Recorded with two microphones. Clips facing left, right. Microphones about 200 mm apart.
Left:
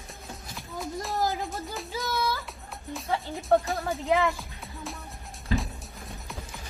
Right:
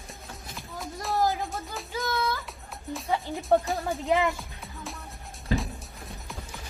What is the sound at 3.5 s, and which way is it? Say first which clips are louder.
Speech: even; centre (ahead or behind).